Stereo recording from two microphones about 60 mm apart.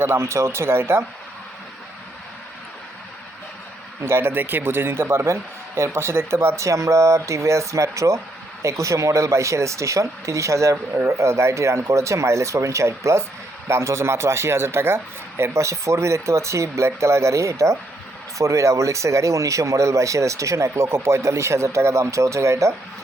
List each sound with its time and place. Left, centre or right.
0.0 s a man's voice: right
4.0 s a man's voice: right